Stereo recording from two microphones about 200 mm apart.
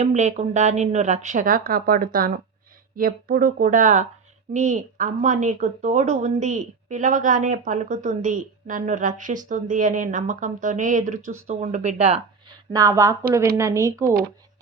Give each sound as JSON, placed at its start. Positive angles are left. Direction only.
{"t": 0.0, "sound": "speech", "side_deg": -35}
{"t": 12.7, "sound": "speech", "side_deg": -15}
{"t": 14.0, "sound": "speech", "side_deg": -45}